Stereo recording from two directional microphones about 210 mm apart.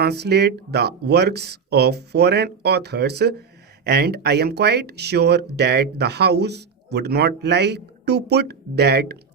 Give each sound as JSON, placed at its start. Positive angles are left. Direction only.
{"t": 0.0, "sound": "speech", "side_deg": -50}